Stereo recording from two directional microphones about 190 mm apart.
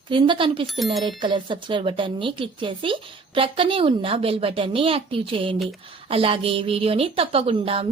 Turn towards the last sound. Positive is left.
turn(degrees=-30)  # may be behind; listen again after turning